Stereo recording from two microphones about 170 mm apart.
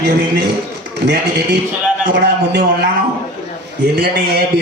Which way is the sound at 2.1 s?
85° right.